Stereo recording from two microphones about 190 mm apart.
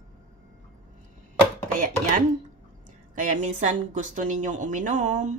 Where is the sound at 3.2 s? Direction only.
40° right (ahead or behind).